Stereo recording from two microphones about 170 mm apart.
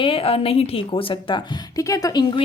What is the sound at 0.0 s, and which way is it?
A woman's voice, 35° left (ahead or behind).